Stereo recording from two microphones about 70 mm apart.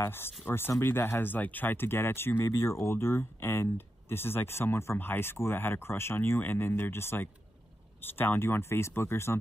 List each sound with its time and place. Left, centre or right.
0.0 s speech: left